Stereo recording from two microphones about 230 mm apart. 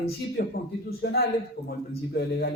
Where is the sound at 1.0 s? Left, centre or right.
Left.